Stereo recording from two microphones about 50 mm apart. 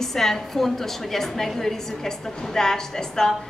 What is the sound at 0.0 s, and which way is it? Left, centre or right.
A woman's voice, centre.